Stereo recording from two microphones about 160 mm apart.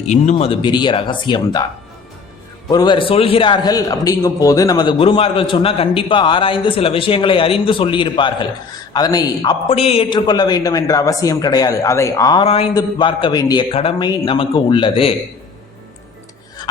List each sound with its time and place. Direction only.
0.1 s a man's voice: 45° left (ahead or behind)
2.6 s a man's voice: 25° left (ahead or behind)
12.4 s a man's voice: 40° left (ahead or behind)